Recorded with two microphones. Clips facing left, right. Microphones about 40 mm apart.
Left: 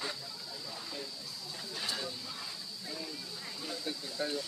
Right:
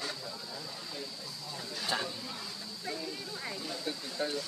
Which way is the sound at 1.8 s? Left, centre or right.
Right.